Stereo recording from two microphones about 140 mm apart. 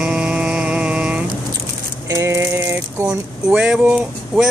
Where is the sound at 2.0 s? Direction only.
20° right (ahead or behind).